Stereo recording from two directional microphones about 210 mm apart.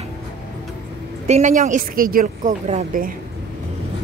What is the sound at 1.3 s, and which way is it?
Speech, 35° right (ahead or behind).